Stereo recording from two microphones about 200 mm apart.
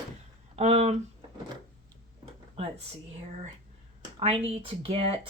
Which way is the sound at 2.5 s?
30° right (ahead or behind).